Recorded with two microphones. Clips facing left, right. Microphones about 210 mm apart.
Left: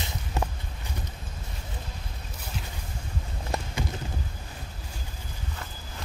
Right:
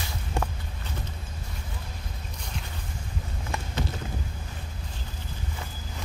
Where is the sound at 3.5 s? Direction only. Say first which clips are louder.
Left 4 dB; 35° left (ahead or behind).